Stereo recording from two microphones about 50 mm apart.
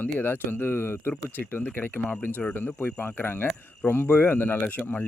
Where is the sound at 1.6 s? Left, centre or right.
Left.